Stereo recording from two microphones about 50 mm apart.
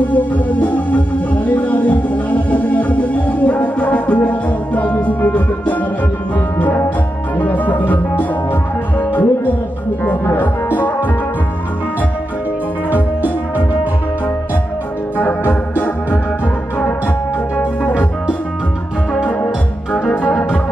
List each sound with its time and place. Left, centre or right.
0.1 s music: left
7.3 s music: left
10.4 s music: left
15.1 s music: left
17.6 s music: left
19.2 s music: left